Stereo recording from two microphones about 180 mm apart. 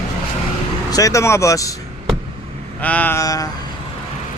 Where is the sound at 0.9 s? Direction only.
20° left (ahead or behind).